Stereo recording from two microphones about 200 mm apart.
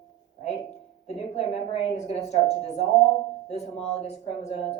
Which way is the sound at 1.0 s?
30° left (ahead or behind).